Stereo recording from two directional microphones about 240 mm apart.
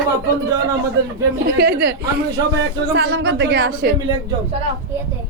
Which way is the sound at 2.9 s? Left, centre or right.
Right.